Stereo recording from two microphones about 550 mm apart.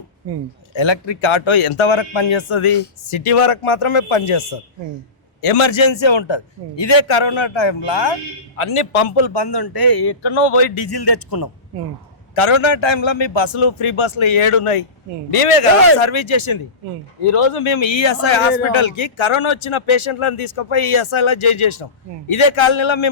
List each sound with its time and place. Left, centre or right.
0.7 s a man's voice: left
8.5 s speech: left
10.8 s a man's voice: left
12.3 s speech: left